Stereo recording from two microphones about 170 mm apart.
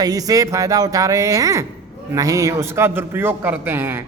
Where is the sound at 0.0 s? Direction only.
20° right (ahead or behind).